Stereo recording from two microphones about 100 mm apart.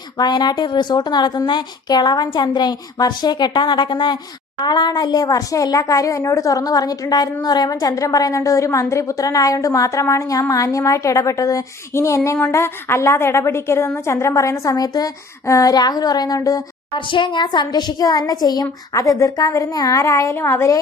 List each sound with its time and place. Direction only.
0.2 s a woman's voice: 45° left (ahead or behind)
17.0 s speech: 55° left (ahead or behind); by 20.7 s 25° left (ahead or behind)